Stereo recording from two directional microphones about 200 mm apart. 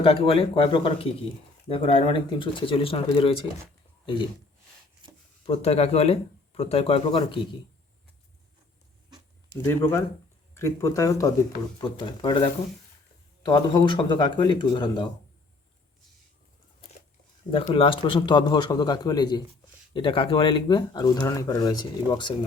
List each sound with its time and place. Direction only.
0.0 s speech: 25° left (ahead or behind)
5.0 s a sound: 25° right (ahead or behind)
5.5 s speech: 30° left (ahead or behind)
10.5 s speech: 15° left (ahead or behind)
17.7 s speech: 25° left (ahead or behind)